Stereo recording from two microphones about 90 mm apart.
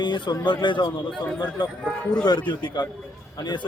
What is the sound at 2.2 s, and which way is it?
Speech, 50° left (ahead or behind).